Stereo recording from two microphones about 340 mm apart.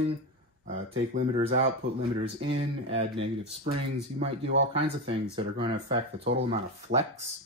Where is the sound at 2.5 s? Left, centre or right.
Centre.